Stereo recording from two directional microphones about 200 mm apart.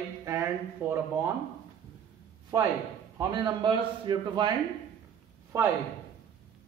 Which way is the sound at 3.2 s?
20° right (ahead or behind).